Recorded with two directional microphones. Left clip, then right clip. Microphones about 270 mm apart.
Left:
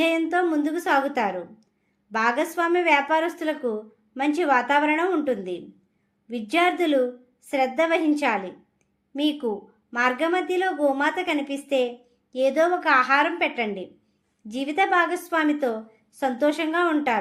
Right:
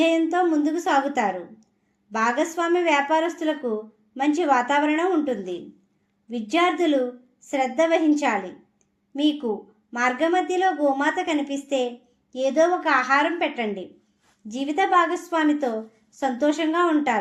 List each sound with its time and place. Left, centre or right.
0.0 s a woman's voice: left